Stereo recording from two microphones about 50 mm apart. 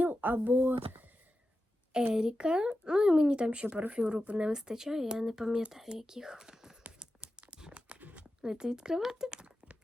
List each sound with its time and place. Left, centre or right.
0.0 s speech: right
2.1 s speech: centre
7.0 s tearing: centre
8.4 s speech: centre